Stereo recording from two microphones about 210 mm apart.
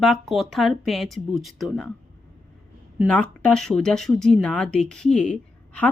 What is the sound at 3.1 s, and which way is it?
Speech, 5° left (ahead or behind).